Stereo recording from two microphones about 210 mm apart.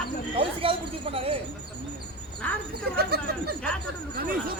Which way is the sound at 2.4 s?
5° left (ahead or behind).